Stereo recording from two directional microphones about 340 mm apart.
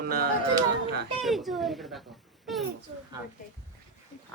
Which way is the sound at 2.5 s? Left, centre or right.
Centre.